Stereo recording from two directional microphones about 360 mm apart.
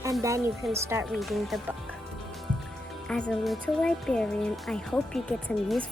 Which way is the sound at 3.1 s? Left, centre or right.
Centre.